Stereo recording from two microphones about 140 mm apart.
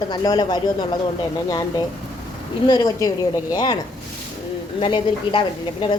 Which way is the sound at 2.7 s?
25° left (ahead or behind).